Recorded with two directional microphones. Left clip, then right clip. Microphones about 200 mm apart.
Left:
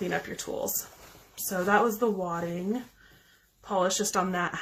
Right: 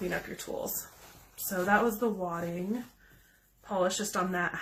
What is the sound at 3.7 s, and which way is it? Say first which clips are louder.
Speech: left 3 dB; 40° left (ahead or behind).